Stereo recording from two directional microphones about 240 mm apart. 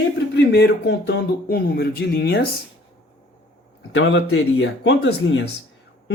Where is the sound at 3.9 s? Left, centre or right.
Left.